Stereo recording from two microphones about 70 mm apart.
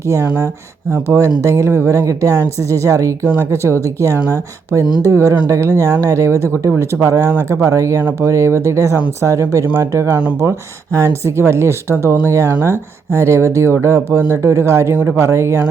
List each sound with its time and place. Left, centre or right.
1.1 s speech: right
2.0 s a woman's voice: right